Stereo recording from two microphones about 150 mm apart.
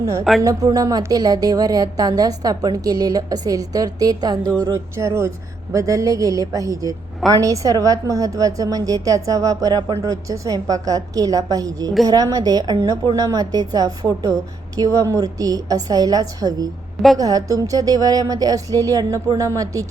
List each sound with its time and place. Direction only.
0.0 s a woman's voice: 20° right (ahead or behind)